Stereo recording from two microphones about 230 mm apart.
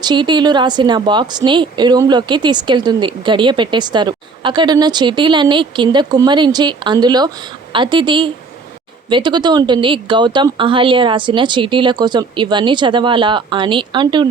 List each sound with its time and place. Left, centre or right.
0.0 s a woman's voice: centre